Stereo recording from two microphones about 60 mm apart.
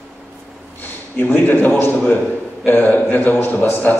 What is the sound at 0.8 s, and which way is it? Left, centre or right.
A man's voice, left.